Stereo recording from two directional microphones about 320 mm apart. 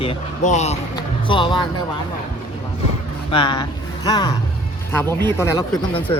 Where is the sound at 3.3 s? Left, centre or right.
Centre.